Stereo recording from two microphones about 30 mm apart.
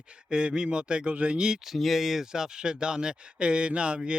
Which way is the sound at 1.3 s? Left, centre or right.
Right.